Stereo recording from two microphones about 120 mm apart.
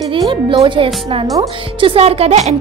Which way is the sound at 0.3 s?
45° right (ahead or behind).